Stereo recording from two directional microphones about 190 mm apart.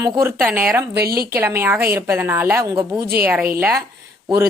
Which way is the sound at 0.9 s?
55° right (ahead or behind).